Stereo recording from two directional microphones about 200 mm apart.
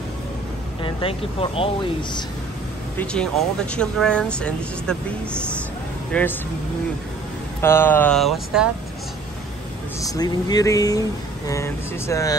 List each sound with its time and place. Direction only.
0.8 s speech: 25° left (ahead or behind)
3.0 s speech: 5° left (ahead or behind)
7.6 s speech: 10° left (ahead or behind)
9.9 s speech: 20° left (ahead or behind)